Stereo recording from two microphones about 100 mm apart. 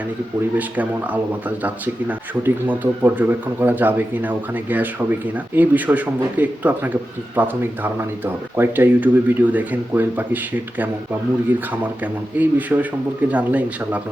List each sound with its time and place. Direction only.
0.5 s speech: 15° right (ahead or behind)
12.4 s speech: 15° right (ahead or behind)